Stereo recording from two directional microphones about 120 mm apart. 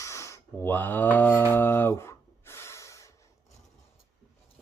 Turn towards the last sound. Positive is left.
turn(degrees=25)  # may be behind; listen again after turning